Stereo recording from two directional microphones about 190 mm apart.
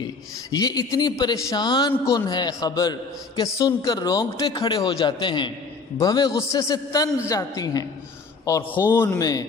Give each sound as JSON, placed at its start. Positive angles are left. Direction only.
{"t": 0.5, "sound": "a man's voice", "side_deg": 20}